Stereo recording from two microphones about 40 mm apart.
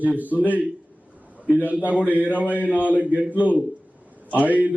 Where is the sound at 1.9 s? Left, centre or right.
Right.